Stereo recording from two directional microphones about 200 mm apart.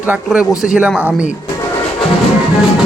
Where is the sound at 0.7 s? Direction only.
5° right (ahead or behind).